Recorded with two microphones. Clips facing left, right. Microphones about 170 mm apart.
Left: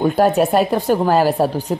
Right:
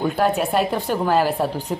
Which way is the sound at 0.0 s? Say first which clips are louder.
Left 5 dB; 40° left (ahead or behind).